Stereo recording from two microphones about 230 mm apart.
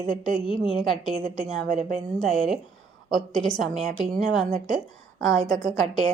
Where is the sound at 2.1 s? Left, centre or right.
Centre.